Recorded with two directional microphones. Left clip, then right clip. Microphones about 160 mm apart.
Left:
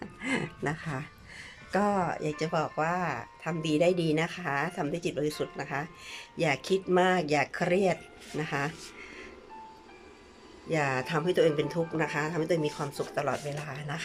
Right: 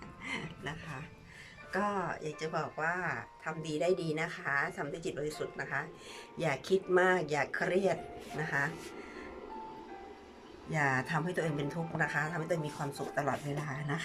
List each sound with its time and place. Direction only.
0.2 s music: 45° left (ahead or behind)
1.7 s speech: 25° left (ahead or behind); by 8.7 s 10° left (ahead or behind)
10.7 s speech: 10° left (ahead or behind)